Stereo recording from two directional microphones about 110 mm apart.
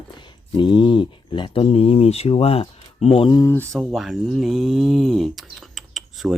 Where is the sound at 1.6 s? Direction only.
65° left (ahead or behind).